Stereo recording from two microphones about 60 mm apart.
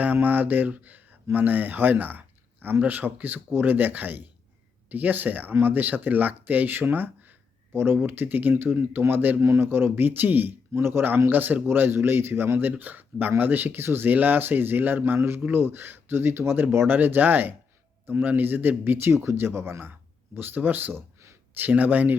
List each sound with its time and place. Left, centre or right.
0.0 s speech: right
9.4 s speech: right